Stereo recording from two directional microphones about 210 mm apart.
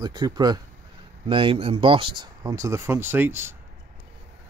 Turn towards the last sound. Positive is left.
turn(degrees=-10)  # may be behind; listen again after turning